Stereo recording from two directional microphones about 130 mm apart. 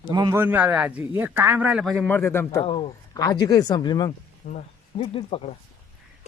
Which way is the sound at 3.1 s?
30° left (ahead or behind).